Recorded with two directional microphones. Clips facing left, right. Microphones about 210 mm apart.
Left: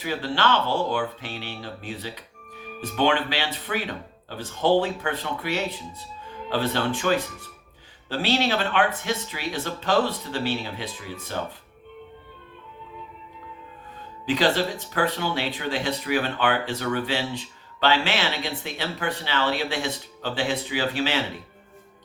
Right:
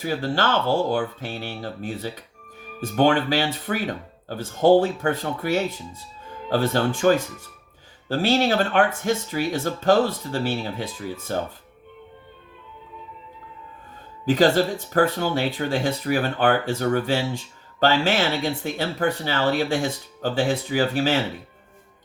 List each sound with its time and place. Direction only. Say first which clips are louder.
0.0 s speech: right 2 dB; 45° right (ahead or behind)
14.3 s speech: right 4 dB; 45° right (ahead or behind)